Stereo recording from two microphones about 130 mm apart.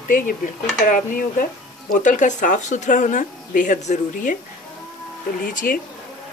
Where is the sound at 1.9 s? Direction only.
75° left (ahead or behind).